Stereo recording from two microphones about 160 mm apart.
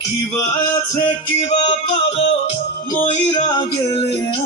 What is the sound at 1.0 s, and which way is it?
Music, 30° left (ahead or behind).